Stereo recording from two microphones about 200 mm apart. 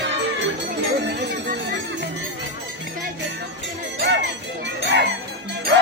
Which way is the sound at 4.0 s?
60° right (ahead or behind).